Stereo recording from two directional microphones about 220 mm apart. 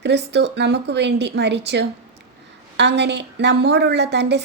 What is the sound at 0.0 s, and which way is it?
A woman's voice, 50° right (ahead or behind).